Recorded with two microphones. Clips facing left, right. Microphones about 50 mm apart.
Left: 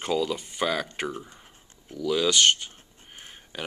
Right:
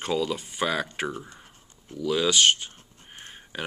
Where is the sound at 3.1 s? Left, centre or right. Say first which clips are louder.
Right 2 dB; centre.